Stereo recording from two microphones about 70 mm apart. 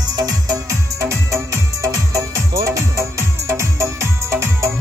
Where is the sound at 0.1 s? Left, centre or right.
Right.